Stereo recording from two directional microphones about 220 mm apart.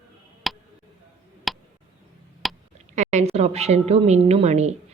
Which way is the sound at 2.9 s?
30° right (ahead or behind).